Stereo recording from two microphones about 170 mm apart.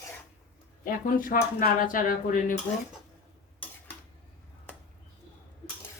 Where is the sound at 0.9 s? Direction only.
55° left (ahead or behind).